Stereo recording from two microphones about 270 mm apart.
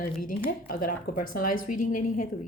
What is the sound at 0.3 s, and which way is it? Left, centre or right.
A woman's voice, left.